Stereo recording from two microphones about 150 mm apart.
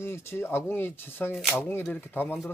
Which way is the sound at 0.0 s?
15° left (ahead or behind).